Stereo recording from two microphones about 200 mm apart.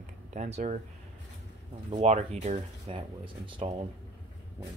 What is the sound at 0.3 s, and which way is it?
Speech, 35° right (ahead or behind).